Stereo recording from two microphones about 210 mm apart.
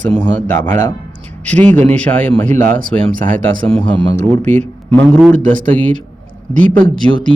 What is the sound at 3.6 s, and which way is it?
Speech, 5° left (ahead or behind).